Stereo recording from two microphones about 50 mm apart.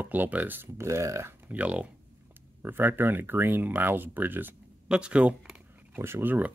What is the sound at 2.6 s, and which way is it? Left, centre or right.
Speech, right.